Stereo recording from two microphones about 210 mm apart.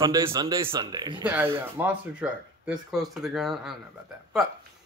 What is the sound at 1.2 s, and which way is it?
A man's voice, 10° right (ahead or behind).